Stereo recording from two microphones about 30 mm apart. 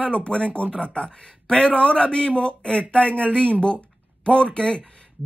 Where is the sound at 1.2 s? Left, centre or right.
Left.